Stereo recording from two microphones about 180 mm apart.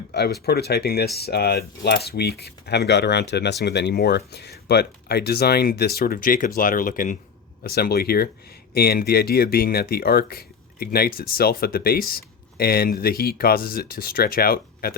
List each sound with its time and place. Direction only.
0.1 s speech: 65° left (ahead or behind)